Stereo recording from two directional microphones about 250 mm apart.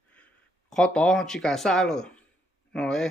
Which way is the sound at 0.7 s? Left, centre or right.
Centre.